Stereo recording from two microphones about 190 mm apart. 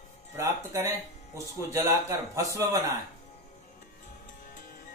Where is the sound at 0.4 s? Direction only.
15° right (ahead or behind).